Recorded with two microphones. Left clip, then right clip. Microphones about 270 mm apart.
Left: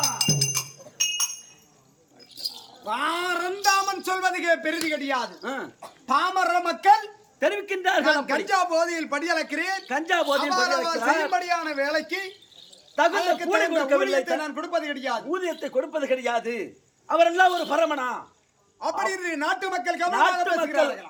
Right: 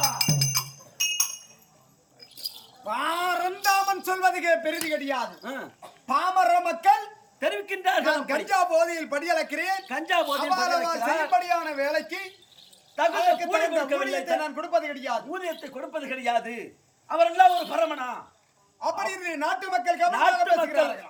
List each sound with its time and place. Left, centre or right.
0.0 s music: centre
2.8 s a sound: centre
6.1 s a man's voice: centre